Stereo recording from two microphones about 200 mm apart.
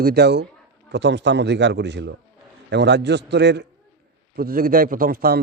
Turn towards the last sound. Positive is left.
turn(degrees=-50)  # may be behind; listen again after turning